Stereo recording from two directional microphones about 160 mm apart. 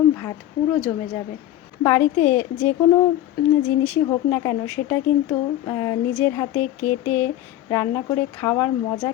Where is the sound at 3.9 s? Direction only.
15° left (ahead or behind).